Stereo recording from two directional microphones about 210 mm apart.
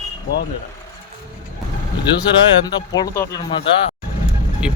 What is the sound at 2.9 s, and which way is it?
Speech, 15° left (ahead or behind).